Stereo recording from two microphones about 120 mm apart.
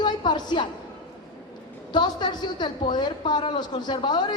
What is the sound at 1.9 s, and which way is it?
A woman's voice, 40° left (ahead or behind).